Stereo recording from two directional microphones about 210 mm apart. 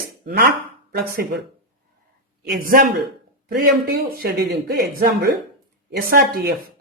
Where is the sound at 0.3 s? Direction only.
50° right (ahead or behind).